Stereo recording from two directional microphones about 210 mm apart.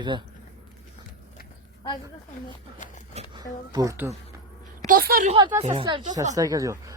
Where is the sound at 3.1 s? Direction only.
20° right (ahead or behind).